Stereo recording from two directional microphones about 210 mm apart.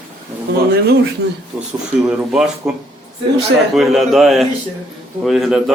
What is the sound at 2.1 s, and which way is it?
A man's voice, 5° right (ahead or behind).